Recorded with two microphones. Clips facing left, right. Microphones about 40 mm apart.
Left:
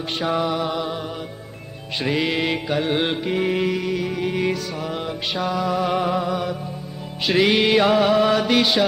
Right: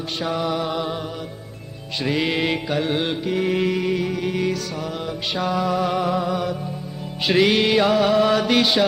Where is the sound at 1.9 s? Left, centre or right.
Centre.